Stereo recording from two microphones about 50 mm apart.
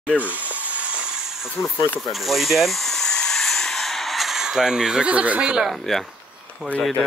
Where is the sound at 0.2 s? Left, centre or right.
Right.